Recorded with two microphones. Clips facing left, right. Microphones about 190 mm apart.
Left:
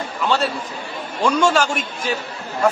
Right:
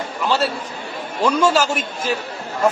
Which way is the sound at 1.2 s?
5° right (ahead or behind).